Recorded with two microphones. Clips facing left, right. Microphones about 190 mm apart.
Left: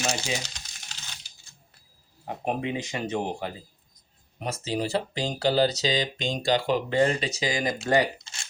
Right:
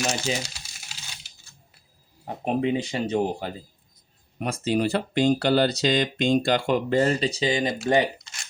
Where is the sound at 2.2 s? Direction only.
35° right (ahead or behind).